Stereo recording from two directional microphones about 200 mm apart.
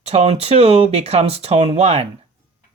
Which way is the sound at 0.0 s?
30° right (ahead or behind).